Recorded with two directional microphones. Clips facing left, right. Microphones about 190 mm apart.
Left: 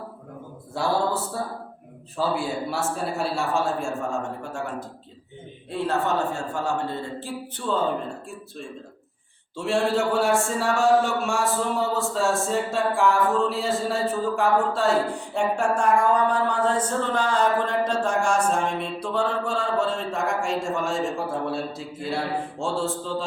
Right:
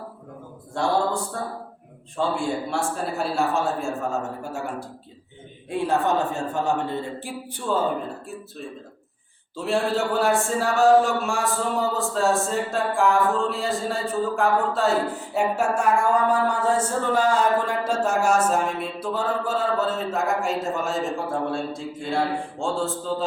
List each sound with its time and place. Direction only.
0.7 s speech: 5° left (ahead or behind)
5.7 s a man's voice: 15° right (ahead or behind)
9.6 s speech: centre (ahead or behind)